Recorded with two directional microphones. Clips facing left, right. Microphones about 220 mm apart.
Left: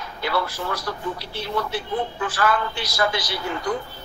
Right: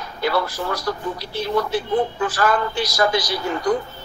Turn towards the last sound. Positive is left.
turn(degrees=-40)  # may be behind; listen again after turning